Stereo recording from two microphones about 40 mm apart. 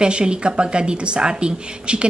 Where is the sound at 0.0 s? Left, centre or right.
Right.